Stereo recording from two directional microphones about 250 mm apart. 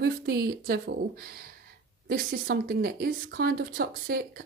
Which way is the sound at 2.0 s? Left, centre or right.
Right.